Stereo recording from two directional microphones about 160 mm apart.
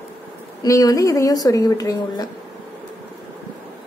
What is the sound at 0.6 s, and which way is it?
A woman's voice, 20° left (ahead or behind).